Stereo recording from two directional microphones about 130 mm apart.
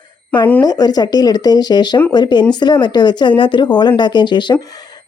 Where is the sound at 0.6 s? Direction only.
30° left (ahead or behind).